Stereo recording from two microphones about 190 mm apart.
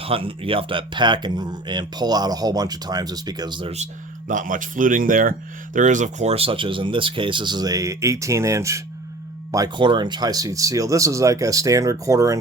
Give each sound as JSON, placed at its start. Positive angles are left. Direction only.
{"t": 0.0, "sound": "speech", "side_deg": -30}
{"t": 4.3, "sound": "speech", "side_deg": -45}